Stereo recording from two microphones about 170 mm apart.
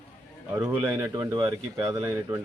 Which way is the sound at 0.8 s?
20° right (ahead or behind).